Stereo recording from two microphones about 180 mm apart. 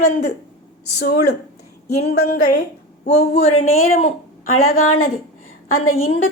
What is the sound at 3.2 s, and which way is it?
Speech, 35° left (ahead or behind).